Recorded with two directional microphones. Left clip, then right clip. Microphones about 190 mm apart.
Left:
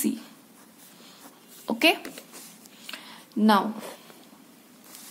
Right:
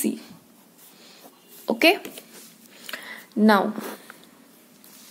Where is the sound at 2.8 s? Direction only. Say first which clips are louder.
Right 5 dB; 30° right (ahead or behind).